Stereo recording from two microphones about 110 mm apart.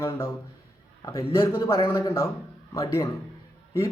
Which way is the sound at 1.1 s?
25° left (ahead or behind).